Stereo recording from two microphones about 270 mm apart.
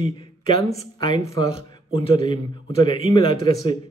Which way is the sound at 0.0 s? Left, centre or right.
Centre.